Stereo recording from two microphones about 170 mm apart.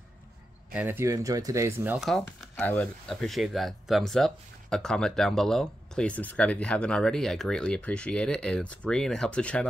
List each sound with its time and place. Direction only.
0.7 s speech: 15° right (ahead or behind)
2.0 s speech: centre (ahead or behind)